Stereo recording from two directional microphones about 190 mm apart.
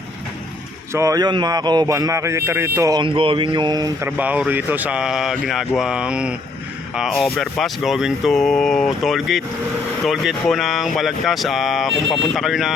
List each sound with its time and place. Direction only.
0.9 s speech: 15° right (ahead or behind)
4.2 s speech: 10° right (ahead or behind)